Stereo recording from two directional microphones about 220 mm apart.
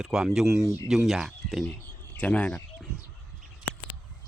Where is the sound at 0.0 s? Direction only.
Centre (ahead or behind).